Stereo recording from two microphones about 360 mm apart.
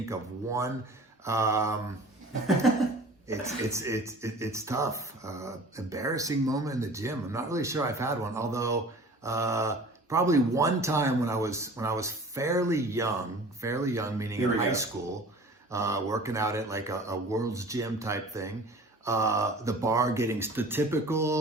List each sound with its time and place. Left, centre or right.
0.0 s speech: centre
3.2 s speech: centre